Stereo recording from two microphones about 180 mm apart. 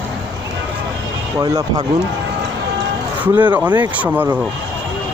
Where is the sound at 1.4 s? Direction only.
20° right (ahead or behind).